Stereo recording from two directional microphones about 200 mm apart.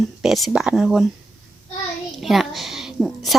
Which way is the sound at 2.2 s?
Centre (ahead or behind).